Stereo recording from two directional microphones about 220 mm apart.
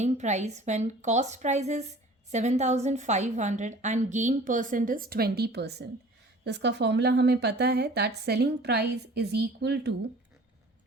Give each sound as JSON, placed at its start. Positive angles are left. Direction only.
{"t": 0.0, "sound": "a woman's voice", "side_deg": -30}